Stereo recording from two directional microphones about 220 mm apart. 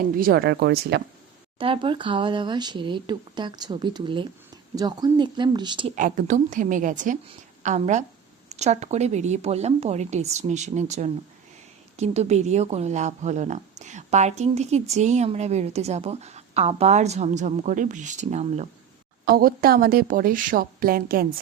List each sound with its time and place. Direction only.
0.2 s speech: 45° right (ahead or behind)
1.5 s speech: 25° right (ahead or behind)
5.9 s speech: 35° right (ahead or behind)
19.2 s speech: 45° right (ahead or behind)